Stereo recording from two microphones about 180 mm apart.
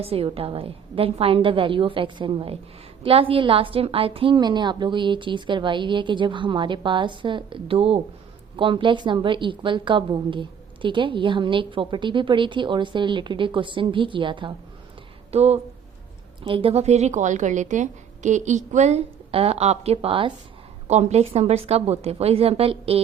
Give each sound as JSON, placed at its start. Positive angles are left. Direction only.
{"t": 0.0, "sound": "a woman's voice", "side_deg": -35}